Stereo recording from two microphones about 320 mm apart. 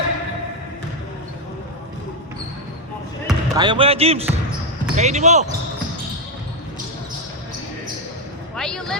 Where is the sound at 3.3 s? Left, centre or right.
Centre.